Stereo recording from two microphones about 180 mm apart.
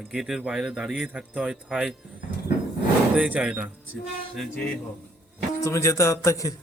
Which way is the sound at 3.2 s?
5° right (ahead or behind).